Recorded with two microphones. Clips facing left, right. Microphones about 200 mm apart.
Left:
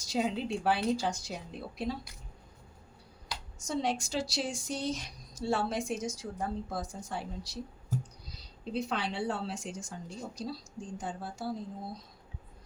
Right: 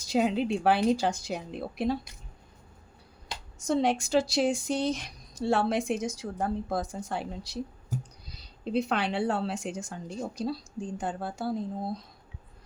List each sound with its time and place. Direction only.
0.0 s a woman's voice: 65° right (ahead or behind)
3.6 s a woman's voice: 60° right (ahead or behind)